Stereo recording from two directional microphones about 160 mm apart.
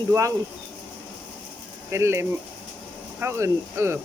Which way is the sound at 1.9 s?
15° right (ahead or behind).